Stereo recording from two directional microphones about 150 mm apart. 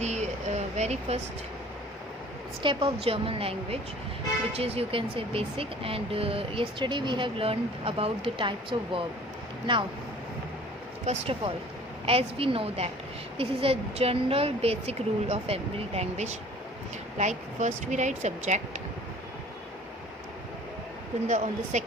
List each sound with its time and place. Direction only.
0.0 s a sound: 50° right (ahead or behind)
2.6 s speech: 35° right (ahead or behind)
11.0 s speech: 45° right (ahead or behind)
21.2 s speech: 50° right (ahead or behind)